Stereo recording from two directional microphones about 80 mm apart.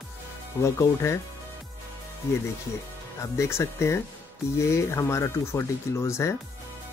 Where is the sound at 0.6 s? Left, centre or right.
Left.